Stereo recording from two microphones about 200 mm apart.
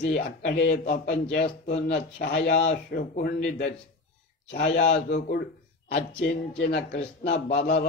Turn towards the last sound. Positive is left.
turn(degrees=55)  # may be behind; listen again after turning